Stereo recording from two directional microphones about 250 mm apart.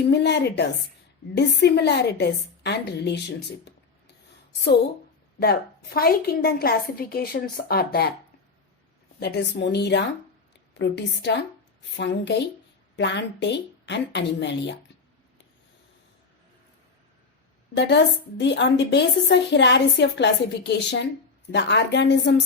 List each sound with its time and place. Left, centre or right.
0.0 s a woman's voice: left
5.4 s a woman's voice: left
9.2 s a woman's voice: left
17.7 s a woman's voice: left